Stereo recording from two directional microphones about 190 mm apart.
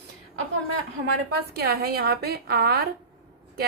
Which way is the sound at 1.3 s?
55° right (ahead or behind).